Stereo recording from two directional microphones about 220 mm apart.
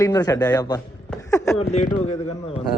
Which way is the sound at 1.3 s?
15° left (ahead or behind).